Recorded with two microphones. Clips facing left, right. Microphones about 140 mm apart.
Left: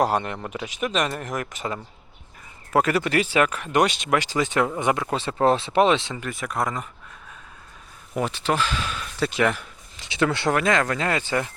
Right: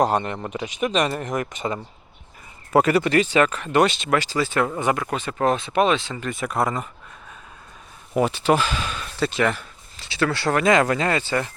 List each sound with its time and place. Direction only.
0.0 s speech: 5° left (ahead or behind); by 6.2 s 20° left (ahead or behind)
6.2 s speech: centre (ahead or behind)
8.1 s speech: 10° right (ahead or behind); by 10.5 s 20° left (ahead or behind)
10.5 s speech: 5° right (ahead or behind)
11.2 s speech: 15° left (ahead or behind)